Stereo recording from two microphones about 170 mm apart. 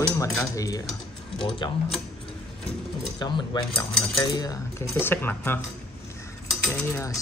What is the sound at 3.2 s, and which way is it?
Speech, 25° left (ahead or behind).